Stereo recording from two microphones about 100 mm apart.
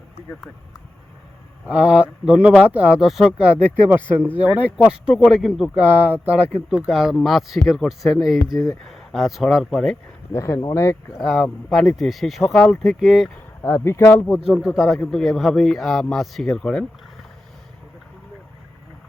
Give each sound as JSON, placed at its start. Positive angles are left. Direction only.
{"t": 1.6, "sound": "speech", "side_deg": -10}
{"t": 5.7, "sound": "a man's voice", "side_deg": -20}
{"t": 10.3, "sound": "speech", "side_deg": 30}
{"t": 11.2, "sound": "a man's voice", "side_deg": 0}
{"t": 13.6, "sound": "speech", "side_deg": 25}
{"t": 14.3, "sound": "a man's voice", "side_deg": -5}